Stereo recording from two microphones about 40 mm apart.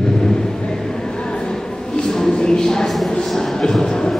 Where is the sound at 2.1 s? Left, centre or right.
Centre.